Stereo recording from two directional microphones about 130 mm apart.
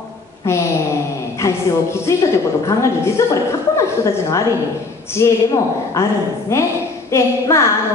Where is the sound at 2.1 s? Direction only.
20° left (ahead or behind).